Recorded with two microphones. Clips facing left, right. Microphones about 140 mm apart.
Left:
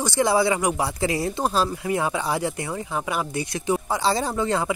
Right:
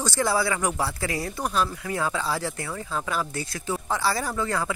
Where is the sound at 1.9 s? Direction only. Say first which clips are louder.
Left 3 dB; 20° left (ahead or behind).